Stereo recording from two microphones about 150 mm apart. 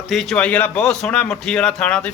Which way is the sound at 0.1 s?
Centre (ahead or behind).